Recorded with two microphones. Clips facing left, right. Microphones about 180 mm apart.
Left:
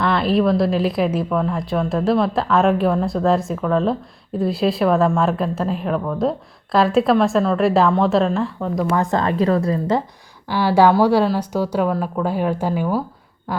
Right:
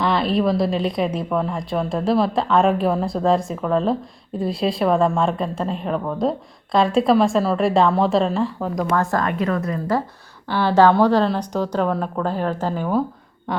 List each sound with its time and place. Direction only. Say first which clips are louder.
0.0 s speech: left 2 dB; centre (ahead or behind)
9.0 s a woman's voice: left 1 dB; 20° left (ahead or behind)
9.2 s a woman's voice: left 4 dB; 30° left (ahead or behind)
10.5 s speech: left 1 dB; 10° left (ahead or behind)